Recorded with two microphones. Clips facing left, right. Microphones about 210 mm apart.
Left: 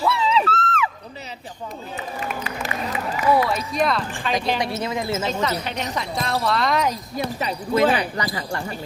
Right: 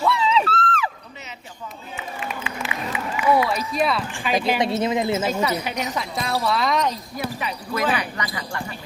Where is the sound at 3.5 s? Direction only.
Centre (ahead or behind).